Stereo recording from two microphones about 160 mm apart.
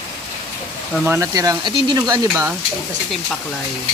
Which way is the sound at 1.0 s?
15° right (ahead or behind).